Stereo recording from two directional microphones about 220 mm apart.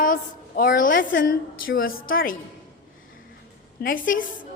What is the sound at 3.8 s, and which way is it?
Speech, 40° left (ahead or behind).